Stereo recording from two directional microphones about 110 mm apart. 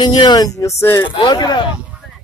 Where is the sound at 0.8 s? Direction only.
25° left (ahead or behind).